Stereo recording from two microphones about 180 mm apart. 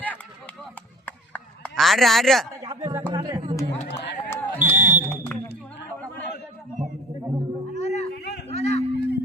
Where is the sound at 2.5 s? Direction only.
20° right (ahead or behind).